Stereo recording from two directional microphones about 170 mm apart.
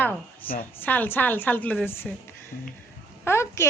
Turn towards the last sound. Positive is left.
turn(degrees=15)  # may be behind; listen again after turning